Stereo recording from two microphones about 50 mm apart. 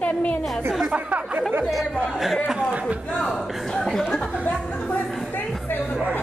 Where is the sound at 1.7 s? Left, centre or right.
Centre.